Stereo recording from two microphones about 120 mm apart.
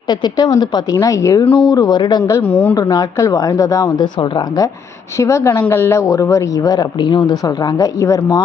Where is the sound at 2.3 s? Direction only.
25° left (ahead or behind).